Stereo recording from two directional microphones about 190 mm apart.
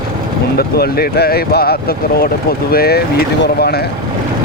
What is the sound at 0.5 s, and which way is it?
Speech, 55° left (ahead or behind).